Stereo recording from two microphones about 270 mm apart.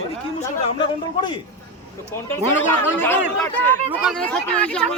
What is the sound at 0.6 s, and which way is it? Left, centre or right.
Speech, centre.